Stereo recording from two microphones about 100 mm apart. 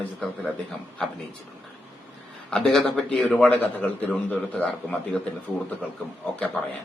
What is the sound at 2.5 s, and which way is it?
A man's voice, 5° left (ahead or behind).